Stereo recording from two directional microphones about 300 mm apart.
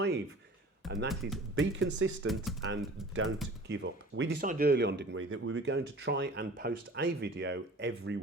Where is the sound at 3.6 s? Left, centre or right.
Right.